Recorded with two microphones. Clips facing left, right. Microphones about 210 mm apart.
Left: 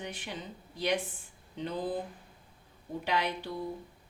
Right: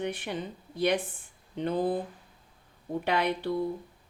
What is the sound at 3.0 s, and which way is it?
Speech, 60° right (ahead or behind).